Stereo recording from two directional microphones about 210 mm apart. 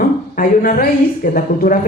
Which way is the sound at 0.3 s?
45° left (ahead or behind).